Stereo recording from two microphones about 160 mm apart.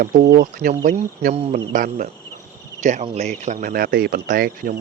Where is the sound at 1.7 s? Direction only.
55° right (ahead or behind).